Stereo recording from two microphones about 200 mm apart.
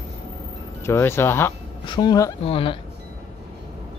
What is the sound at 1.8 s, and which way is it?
Speech, 20° left (ahead or behind).